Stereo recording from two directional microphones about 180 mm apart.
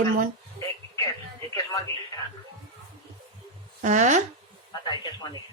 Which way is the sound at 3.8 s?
40° right (ahead or behind).